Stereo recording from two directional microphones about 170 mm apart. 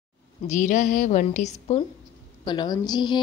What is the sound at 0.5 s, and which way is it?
A woman's voice, 45° left (ahead or behind).